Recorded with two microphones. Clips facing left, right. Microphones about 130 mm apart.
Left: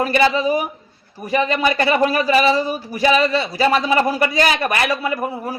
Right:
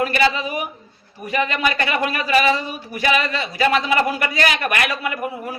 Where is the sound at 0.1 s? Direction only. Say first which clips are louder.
Left 4 dB; 30° left (ahead or behind).